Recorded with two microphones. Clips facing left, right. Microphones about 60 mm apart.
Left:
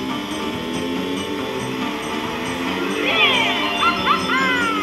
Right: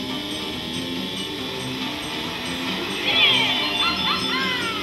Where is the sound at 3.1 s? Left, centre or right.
Centre.